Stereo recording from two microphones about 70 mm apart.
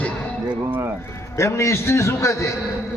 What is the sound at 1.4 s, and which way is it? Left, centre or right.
A man's voice, left.